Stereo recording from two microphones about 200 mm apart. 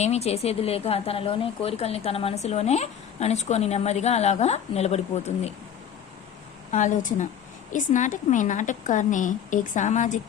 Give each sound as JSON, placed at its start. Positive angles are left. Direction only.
{"t": 0.0, "sound": "a woman's voice", "side_deg": 30}
{"t": 6.7, "sound": "a woman's voice", "side_deg": 40}